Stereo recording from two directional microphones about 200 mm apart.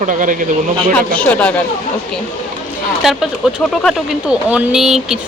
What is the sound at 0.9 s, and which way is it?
Speech, 5° left (ahead or behind).